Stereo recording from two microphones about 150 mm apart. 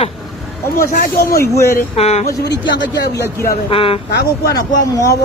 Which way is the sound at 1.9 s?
45° left (ahead or behind).